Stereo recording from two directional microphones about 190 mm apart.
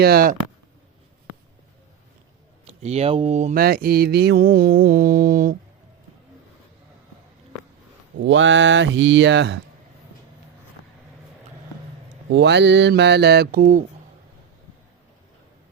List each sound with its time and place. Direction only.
0.0 s mantra: 50° right (ahead or behind)
2.6 s speech: 35° right (ahead or behind)
3.6 s mantra: 50° right (ahead or behind)
8.2 s speech: 85° right; by 9.6 s 65° right (ahead or behind)
12.3 s mantra: 65° right (ahead or behind); by 13.8 s 45° right (ahead or behind)